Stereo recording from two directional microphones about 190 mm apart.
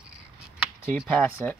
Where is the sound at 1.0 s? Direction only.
5° left (ahead or behind).